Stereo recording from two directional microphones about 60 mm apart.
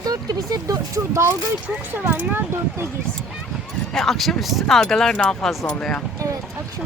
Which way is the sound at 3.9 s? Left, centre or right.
Centre.